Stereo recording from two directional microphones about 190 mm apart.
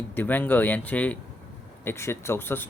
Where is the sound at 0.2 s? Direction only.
10° left (ahead or behind).